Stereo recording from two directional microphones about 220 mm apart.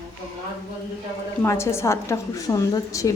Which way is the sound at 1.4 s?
10° left (ahead or behind).